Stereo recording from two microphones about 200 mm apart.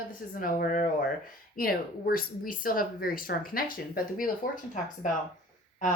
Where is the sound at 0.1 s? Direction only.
45° left (ahead or behind).